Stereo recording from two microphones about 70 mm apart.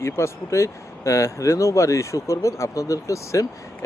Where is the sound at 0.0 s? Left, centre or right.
Left.